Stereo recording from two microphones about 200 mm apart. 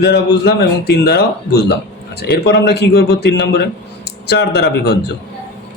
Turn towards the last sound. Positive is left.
turn(degrees=55)  # may be behind; listen again after turning